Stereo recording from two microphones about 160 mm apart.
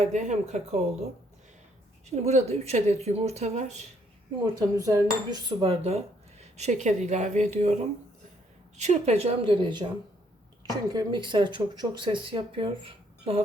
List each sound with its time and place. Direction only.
0.0 s speech: 45° right (ahead or behind)
2.0 s speech: 45° right (ahead or behind)
4.8 s speech: 20° right (ahead or behind); by 7.8 s 45° right (ahead or behind)
8.8 s a woman's voice: 45° right (ahead or behind)